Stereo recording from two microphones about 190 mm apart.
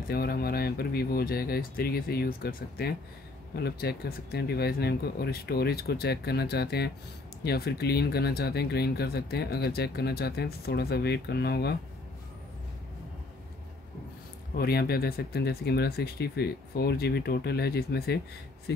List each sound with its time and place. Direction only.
0.1 s speech: 55° left (ahead or behind)
14.5 s speech: 55° left (ahead or behind)